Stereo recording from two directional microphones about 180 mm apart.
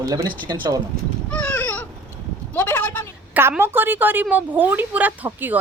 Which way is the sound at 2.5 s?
10° left (ahead or behind).